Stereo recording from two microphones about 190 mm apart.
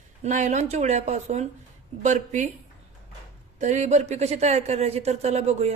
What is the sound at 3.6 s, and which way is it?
Speech, 40° right (ahead or behind).